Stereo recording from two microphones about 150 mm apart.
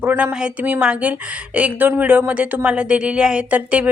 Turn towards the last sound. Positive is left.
turn(degrees=-10)  # may be behind; listen again after turning